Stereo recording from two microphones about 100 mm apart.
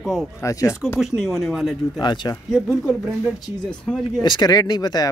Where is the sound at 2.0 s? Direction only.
50° left (ahead or behind).